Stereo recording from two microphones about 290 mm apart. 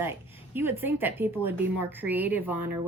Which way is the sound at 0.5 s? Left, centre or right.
Centre.